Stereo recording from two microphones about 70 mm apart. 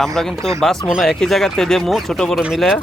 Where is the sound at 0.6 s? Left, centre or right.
Centre.